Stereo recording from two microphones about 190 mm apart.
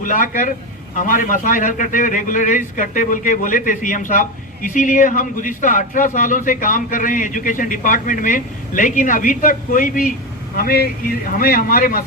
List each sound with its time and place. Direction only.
0.0 s a man's voice: 45° left (ahead or behind)